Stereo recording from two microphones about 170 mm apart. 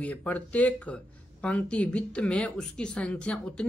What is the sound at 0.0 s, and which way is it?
Speech, 10° left (ahead or behind).